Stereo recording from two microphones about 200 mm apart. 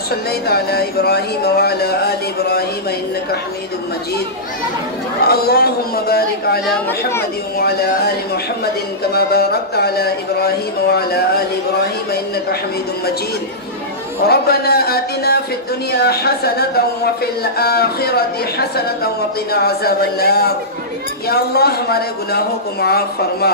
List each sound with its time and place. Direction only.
0.1 s speech: 50° left (ahead or behind)
5.2 s speech: 50° left (ahead or behind)
7.6 s speech: 50° left (ahead or behind)
9.1 s speech: 50° left (ahead or behind)
14.2 s speech: 50° left (ahead or behind)